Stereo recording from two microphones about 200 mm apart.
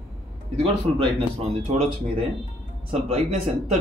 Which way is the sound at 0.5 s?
30° right (ahead or behind).